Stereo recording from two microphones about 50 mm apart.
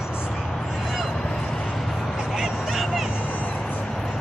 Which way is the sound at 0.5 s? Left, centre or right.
Centre.